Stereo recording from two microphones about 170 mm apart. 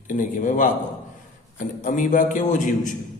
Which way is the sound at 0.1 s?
50° left (ahead or behind).